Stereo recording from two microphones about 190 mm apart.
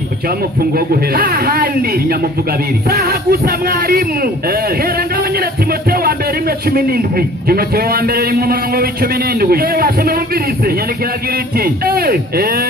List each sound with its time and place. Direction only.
0.7 s a man's voice: 50° right (ahead or behind)